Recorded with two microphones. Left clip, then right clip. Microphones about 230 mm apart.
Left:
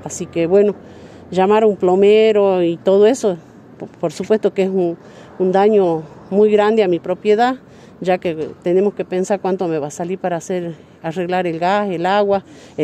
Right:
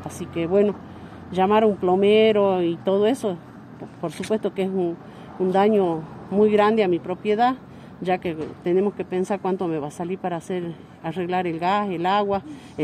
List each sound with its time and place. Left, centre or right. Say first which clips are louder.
0.1 s speech: left 8 dB; left